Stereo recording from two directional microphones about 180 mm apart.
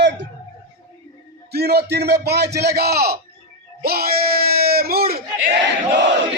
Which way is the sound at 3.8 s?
55° right (ahead or behind).